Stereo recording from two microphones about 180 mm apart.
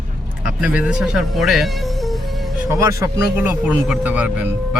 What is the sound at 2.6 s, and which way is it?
Speech, 15° right (ahead or behind).